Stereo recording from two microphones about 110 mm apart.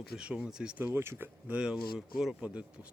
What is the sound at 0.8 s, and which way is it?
Speech, 25° right (ahead or behind).